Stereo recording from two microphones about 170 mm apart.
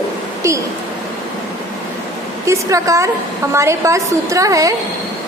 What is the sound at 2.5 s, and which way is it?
A woman's voice, 20° right (ahead or behind).